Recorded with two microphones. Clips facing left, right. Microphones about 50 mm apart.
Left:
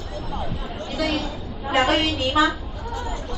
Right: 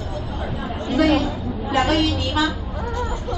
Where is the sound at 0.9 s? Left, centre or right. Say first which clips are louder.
Right 8 dB; right.